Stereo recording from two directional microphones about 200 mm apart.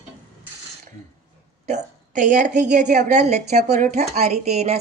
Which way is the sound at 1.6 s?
35° right (ahead or behind).